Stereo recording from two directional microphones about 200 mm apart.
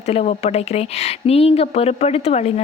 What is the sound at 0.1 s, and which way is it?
Speech, 30° left (ahead or behind).